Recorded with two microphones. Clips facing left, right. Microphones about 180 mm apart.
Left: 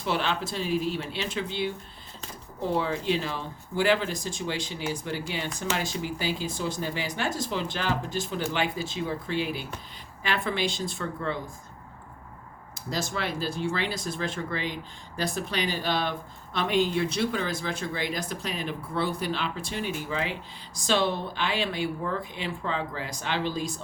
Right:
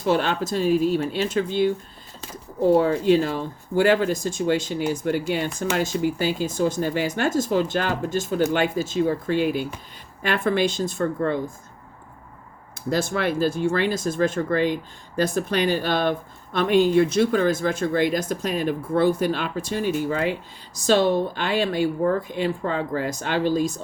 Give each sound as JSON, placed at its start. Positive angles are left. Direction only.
{"t": 0.0, "sound": "speech", "side_deg": -45}
{"t": 2.7, "sound": "speech", "side_deg": -45}
{"t": 12.9, "sound": "speech", "side_deg": -55}